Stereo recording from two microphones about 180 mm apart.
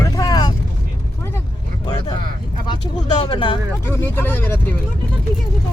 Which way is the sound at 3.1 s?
25° left (ahead or behind).